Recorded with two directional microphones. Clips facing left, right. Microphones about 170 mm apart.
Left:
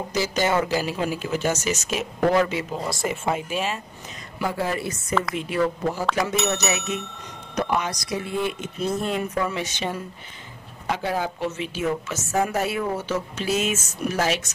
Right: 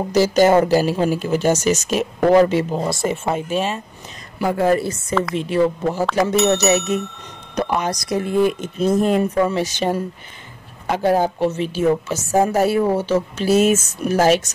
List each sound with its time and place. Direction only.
0.1 s a woman's voice: 40° right (ahead or behind)
4.5 s a woman's voice: 50° right (ahead or behind)
5.3 s a woman's voice: 30° right (ahead or behind)
6.8 s speech: centre (ahead or behind)
7.5 s a woman's voice: 35° right (ahead or behind)